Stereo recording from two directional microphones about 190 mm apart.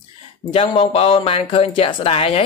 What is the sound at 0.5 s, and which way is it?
Speech, 30° left (ahead or behind).